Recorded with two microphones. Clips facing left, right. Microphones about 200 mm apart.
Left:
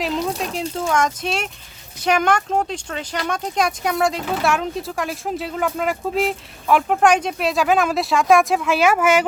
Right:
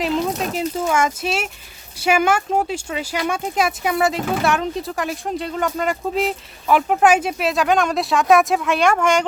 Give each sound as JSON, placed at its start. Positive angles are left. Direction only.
{"t": 0.0, "sound": "speech", "side_deg": 0}